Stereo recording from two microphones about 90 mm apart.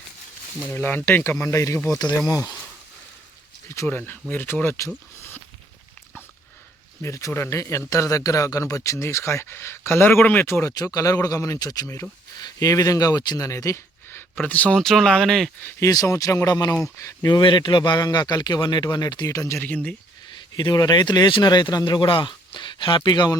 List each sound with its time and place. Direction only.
0.7 s a man's voice: 25° left (ahead or behind); by 2.4 s 45° left (ahead or behind)
3.8 s speech: 20° left (ahead or behind)
7.0 s speech: 35° left (ahead or behind)
14.4 s speech: 15° left (ahead or behind)
14.8 s speech: 5° left (ahead or behind)
15.8 s speech: 40° left (ahead or behind)
17.2 s a man's voice: 55° left (ahead or behind); by 19.5 s 40° left (ahead or behind)
19.5 s speech: 15° left (ahead or behind)
20.3 s speech: 60° left (ahead or behind)